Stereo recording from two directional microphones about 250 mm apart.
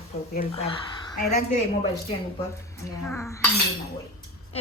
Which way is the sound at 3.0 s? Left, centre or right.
Centre.